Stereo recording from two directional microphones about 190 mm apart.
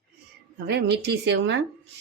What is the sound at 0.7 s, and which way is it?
Speech, 65° right (ahead or behind).